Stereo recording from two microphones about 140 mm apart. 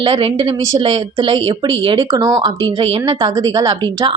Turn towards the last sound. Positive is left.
turn(degrees=-30)  # may be behind; listen again after turning